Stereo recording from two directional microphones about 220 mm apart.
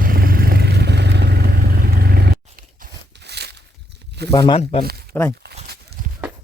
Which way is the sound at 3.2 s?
50° right (ahead or behind).